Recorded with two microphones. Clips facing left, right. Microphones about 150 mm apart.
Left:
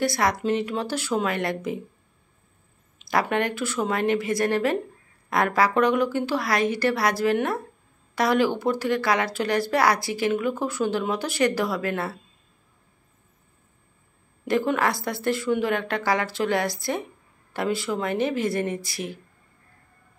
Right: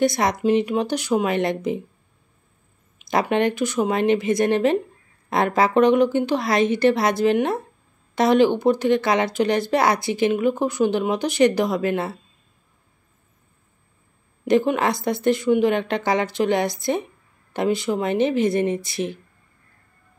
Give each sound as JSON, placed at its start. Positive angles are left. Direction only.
{"t": 0.0, "sound": "speech", "side_deg": -20}
{"t": 3.1, "sound": "speech", "side_deg": -20}
{"t": 14.4, "sound": "speech", "side_deg": -20}